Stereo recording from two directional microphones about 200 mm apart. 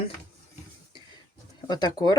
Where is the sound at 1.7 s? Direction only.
20° left (ahead or behind).